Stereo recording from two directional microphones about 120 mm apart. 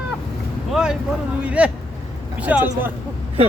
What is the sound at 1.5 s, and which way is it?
Speech, 10° right (ahead or behind).